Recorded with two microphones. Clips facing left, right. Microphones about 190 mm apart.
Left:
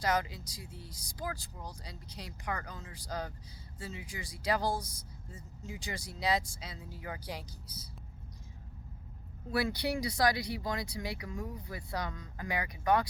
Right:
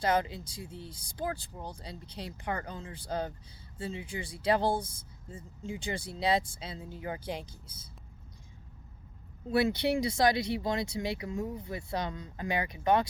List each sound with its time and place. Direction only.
0.0 s speech: 25° right (ahead or behind)
9.5 s speech: 25° right (ahead or behind)